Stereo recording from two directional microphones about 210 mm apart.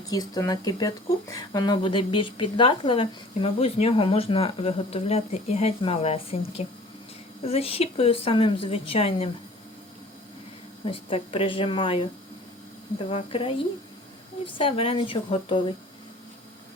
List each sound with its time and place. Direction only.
0.1 s speech: 15° left (ahead or behind)
10.8 s speech: 25° left (ahead or behind)
13.1 s speech: 25° left (ahead or behind)